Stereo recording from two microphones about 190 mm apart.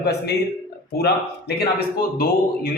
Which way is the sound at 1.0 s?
55° left (ahead or behind).